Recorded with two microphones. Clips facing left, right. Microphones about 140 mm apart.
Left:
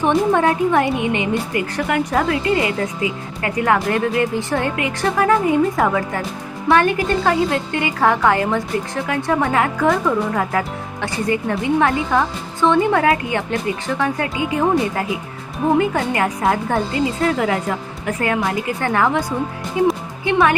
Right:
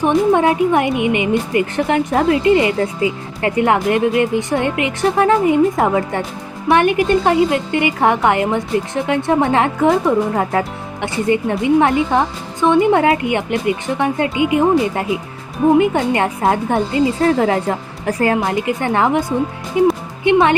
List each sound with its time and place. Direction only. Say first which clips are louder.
0.3 s speech: right 2 dB; 15° right (ahead or behind)